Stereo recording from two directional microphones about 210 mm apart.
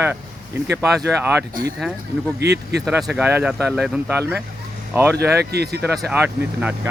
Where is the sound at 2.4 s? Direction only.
50° right (ahead or behind).